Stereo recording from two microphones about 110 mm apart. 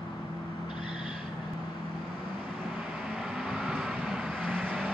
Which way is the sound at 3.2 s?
Centre (ahead or behind).